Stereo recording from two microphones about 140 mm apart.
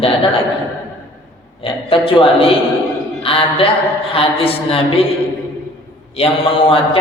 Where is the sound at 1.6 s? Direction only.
40° left (ahead or behind).